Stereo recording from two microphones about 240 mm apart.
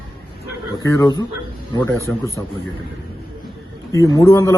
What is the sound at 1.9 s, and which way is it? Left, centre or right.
Speech, centre.